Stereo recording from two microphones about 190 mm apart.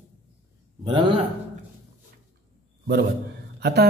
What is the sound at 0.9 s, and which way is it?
Speech, 25° right (ahead or behind).